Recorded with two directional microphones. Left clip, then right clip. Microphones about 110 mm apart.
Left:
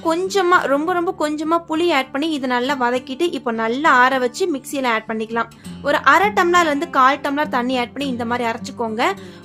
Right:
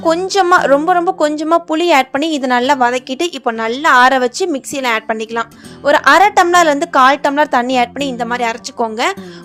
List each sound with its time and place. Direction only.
0.3 s a woman's voice: 40° right (ahead or behind)